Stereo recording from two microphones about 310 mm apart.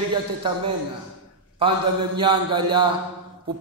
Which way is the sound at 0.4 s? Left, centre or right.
Centre.